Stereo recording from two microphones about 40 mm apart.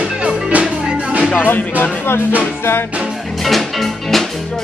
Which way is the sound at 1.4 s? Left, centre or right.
Left.